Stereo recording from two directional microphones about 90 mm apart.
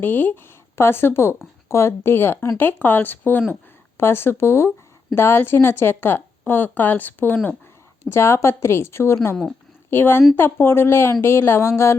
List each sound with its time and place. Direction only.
0.0 s a woman's voice: 25° left (ahead or behind)
9.3 s a woman's voice: 5° left (ahead or behind)
9.9 s a woman's voice: 25° left (ahead or behind)